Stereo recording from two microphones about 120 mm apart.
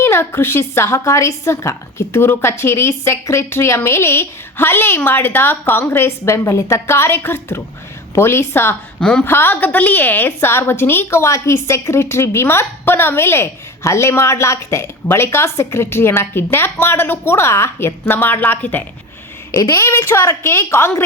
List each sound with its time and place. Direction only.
0.0 s a woman's voice: 20° left (ahead or behind)
9.0 s a woman's voice: 5° left (ahead or behind)
9.2 s a woman's voice: 20° left (ahead or behind)
19.5 s a woman's voice: 25° left (ahead or behind)